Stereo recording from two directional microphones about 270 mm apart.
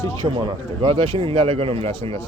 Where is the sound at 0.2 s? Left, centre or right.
Centre.